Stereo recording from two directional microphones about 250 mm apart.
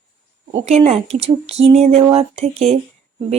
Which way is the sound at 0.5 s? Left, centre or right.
Right.